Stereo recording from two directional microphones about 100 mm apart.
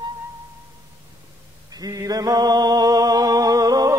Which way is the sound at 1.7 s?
40° right (ahead or behind).